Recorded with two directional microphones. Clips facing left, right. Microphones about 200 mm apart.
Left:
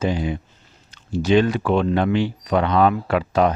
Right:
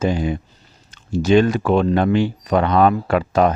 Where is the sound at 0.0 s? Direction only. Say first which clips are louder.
Right 3 dB; 45° right (ahead or behind).